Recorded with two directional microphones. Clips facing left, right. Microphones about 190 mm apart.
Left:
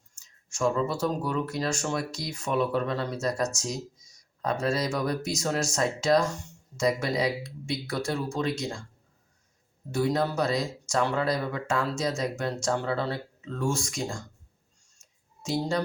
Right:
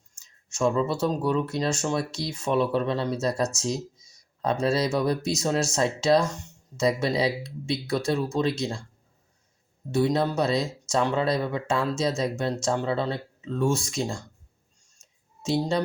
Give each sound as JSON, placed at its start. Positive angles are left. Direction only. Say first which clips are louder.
{"t": 0.6, "sound": "speech", "louder": "right 2 dB", "side_deg": -25}
{"t": 9.9, "sound": "speech", "louder": "right 3 dB", "side_deg": -25}
{"t": 15.4, "sound": "speech", "louder": "right 3 dB", "side_deg": -25}